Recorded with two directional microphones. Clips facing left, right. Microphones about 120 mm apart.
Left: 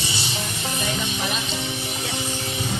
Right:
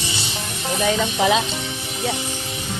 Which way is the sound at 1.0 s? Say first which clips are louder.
Right 9 dB; 90° right.